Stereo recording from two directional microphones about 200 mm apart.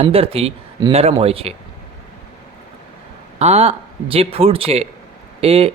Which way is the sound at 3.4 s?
30° right (ahead or behind).